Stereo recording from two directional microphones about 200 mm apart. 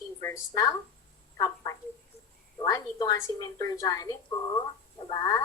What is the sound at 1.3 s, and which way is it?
Speech, 20° left (ahead or behind).